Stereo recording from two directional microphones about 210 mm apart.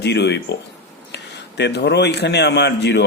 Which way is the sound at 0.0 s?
55° left (ahead or behind).